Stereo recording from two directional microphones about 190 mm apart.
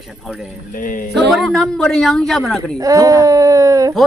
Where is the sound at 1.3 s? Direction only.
Centre (ahead or behind).